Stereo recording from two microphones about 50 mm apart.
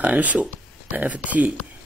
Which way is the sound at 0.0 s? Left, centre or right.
Right.